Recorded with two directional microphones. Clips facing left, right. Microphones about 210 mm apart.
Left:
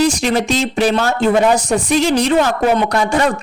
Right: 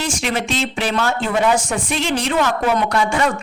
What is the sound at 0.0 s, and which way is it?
Speech, 40° left (ahead or behind).